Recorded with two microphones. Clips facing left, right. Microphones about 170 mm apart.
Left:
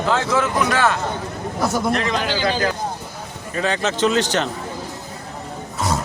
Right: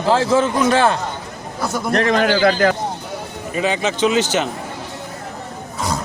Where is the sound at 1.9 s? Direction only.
50° right (ahead or behind).